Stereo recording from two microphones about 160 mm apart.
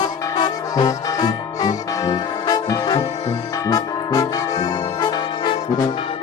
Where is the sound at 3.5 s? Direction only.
20° left (ahead or behind).